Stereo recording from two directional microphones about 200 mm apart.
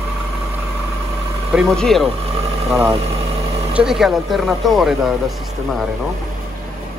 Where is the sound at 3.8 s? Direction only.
Centre (ahead or behind).